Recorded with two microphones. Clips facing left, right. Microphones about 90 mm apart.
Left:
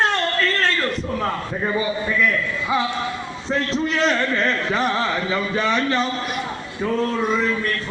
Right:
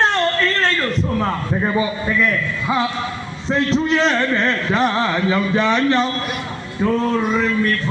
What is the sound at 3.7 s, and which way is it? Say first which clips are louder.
Speech: right 3 dB; centre (ahead or behind).